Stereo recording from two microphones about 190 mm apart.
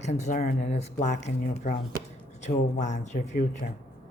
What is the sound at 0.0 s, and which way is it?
Speech, 35° left (ahead or behind).